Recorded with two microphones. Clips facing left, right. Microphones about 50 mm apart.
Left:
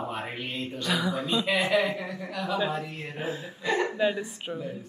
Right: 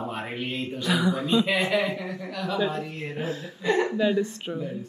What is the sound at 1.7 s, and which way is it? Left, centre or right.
Speech, right.